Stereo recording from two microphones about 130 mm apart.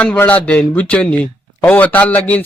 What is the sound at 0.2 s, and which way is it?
A man's voice, 10° left (ahead or behind).